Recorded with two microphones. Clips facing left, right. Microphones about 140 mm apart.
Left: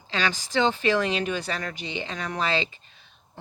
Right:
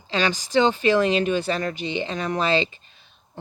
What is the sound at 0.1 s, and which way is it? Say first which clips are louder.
A woman's voice: right 5 dB; 20° right (ahead or behind).